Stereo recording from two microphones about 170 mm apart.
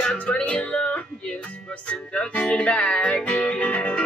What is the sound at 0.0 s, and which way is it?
Music, 5° left (ahead or behind).